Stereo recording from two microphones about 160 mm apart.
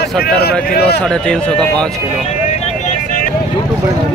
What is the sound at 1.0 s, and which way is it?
Speech, 5° left (ahead or behind).